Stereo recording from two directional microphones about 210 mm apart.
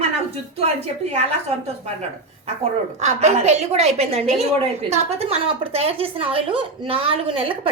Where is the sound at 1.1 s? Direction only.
30° right (ahead or behind).